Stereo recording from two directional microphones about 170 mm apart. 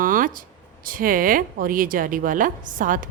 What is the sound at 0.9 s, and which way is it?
A woman's voice, 55° right (ahead or behind).